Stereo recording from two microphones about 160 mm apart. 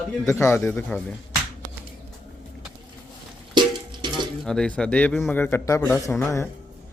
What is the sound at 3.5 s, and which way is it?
Music, 30° right (ahead or behind).